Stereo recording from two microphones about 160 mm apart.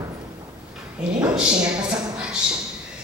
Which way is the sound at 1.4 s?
5° right (ahead or behind).